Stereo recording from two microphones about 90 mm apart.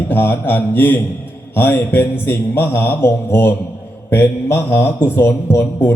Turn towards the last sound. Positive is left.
turn(degrees=25)  # may be behind; listen again after turning